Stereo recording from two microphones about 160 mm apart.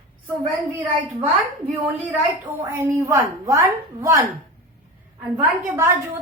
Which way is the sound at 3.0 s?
20° right (ahead or behind).